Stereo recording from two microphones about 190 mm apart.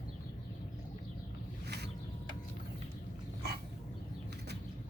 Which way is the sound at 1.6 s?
60° right (ahead or behind).